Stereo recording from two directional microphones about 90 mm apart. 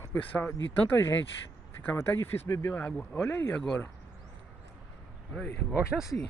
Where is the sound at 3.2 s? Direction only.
15° left (ahead or behind).